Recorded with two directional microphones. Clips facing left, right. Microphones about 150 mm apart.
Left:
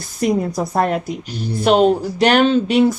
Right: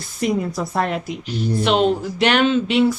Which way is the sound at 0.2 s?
40° left (ahead or behind).